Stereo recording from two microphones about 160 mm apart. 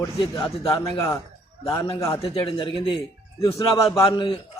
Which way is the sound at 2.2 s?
35° left (ahead or behind).